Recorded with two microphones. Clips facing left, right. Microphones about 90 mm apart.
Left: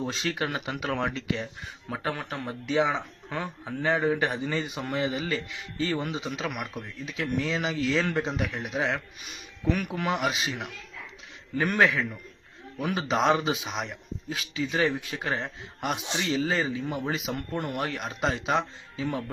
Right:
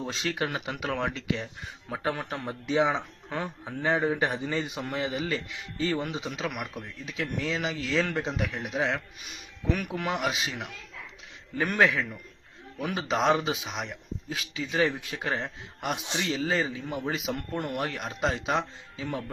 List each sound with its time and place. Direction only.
0.0 s a man's voice: 5° right (ahead or behind)
1.9 s a man's voice: 10° right (ahead or behind); by 19.2 s 5° left (ahead or behind)